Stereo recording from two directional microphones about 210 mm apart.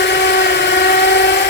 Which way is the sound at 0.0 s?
55° left (ahead or behind).